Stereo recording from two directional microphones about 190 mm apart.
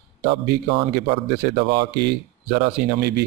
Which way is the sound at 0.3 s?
60° right (ahead or behind).